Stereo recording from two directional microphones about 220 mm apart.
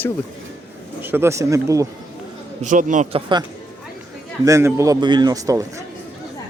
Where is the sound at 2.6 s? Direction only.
35° right (ahead or behind).